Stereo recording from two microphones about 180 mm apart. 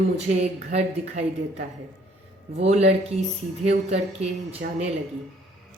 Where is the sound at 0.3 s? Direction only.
40° right (ahead or behind).